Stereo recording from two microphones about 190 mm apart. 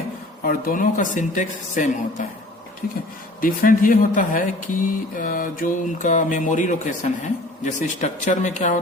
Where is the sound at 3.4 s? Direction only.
45° left (ahead or behind).